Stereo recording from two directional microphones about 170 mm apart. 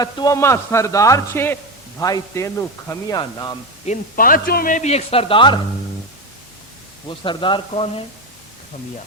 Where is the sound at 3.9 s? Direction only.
55° left (ahead or behind); by 5.6 s 30° left (ahead or behind).